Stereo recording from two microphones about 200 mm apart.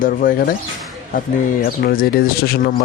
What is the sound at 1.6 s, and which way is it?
Speech, 45° left (ahead or behind).